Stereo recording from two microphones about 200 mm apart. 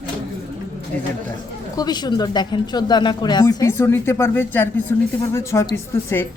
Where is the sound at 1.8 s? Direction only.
20° left (ahead or behind).